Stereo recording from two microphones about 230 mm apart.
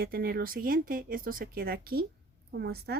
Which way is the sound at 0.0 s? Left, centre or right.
Right.